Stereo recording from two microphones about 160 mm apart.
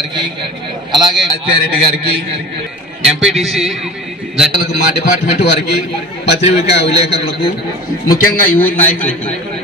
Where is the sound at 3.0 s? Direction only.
5° right (ahead or behind).